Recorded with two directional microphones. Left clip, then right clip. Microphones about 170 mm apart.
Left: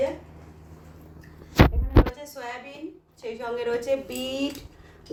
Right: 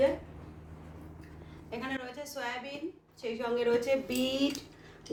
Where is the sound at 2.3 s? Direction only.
10° right (ahead or behind).